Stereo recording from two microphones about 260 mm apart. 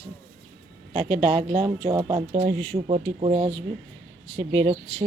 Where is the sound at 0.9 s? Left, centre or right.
Centre.